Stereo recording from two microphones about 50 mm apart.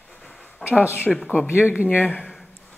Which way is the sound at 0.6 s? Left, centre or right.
Left.